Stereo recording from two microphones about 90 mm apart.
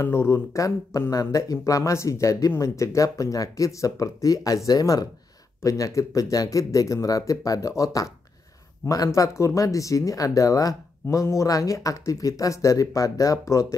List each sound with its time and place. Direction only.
0.0 s speech: 30° left (ahead or behind)